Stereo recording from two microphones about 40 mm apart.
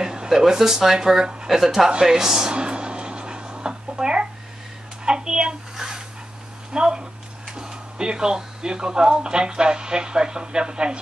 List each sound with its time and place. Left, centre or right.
0.0 s speech: centre
1.9 s a sound: centre
7.5 s speech: centre